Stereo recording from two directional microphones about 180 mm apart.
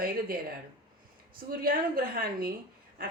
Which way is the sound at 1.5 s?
55° right (ahead or behind).